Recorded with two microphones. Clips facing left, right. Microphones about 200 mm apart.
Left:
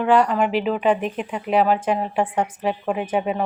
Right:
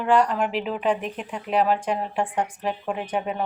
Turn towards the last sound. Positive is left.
turn(degrees=5)  # may be behind; listen again after turning